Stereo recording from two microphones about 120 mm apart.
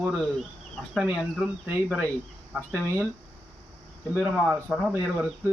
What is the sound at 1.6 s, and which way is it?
Speech, 20° right (ahead or behind).